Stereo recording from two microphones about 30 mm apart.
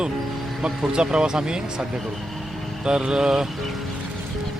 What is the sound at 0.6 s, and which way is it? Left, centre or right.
Speech, right.